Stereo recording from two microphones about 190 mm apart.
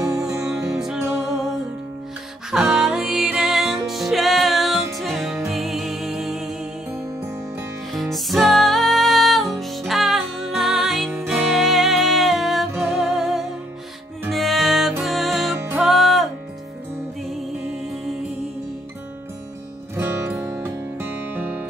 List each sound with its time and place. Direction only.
0.0 s music: 15° right (ahead or behind)
0.5 s music: 5° right (ahead or behind)
2.5 s music: centre (ahead or behind)
7.9 s music: centre (ahead or behind)
20.0 s music: 10° right (ahead or behind)